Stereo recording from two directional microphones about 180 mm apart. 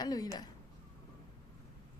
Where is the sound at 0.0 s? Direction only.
20° left (ahead or behind).